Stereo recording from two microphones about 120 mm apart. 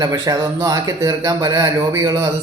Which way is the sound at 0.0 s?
30° right (ahead or behind).